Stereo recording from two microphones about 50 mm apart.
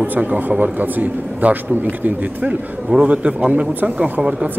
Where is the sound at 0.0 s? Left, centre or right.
Right.